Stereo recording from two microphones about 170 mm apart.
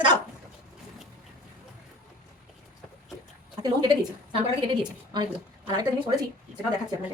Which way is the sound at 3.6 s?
25° right (ahead or behind).